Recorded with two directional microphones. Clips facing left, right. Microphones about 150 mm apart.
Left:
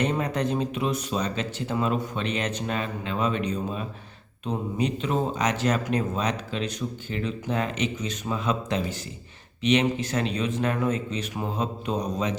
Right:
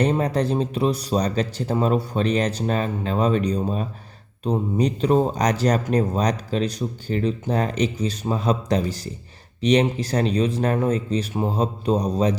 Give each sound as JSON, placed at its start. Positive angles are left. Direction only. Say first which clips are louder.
{"t": 0.0, "sound": "speech", "louder": "right 5 dB", "side_deg": -35}